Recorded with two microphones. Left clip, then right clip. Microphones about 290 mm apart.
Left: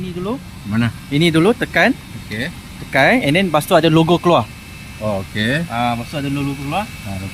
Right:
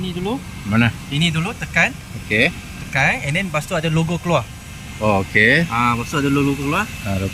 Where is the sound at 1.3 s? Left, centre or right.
Left.